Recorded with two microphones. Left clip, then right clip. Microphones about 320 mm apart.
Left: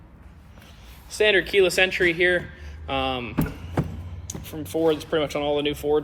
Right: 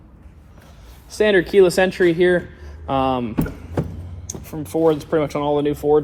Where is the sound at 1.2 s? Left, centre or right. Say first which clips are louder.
Right 3 dB; right.